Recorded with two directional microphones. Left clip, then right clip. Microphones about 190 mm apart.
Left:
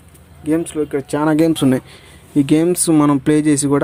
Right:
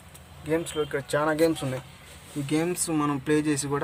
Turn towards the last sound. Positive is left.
turn(degrees=35)  # may be behind; listen again after turning